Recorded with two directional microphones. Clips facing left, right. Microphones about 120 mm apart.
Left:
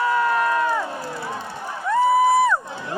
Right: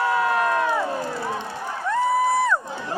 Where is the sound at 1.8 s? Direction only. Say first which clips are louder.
Left 4 dB; 5° left (ahead or behind).